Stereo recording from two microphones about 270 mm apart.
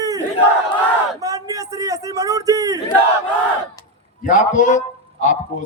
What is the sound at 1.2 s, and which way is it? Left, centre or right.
Speech, centre.